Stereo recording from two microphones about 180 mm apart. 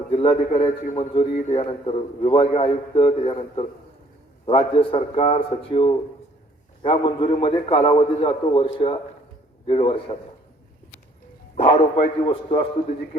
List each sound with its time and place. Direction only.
0.1 s a man's voice: 30° left (ahead or behind)
11.5 s a man's voice: 30° left (ahead or behind)